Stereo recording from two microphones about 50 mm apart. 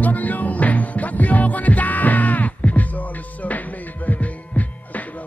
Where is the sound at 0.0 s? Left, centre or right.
Left.